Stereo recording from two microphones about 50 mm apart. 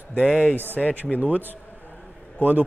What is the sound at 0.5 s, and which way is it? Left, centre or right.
Speech, right.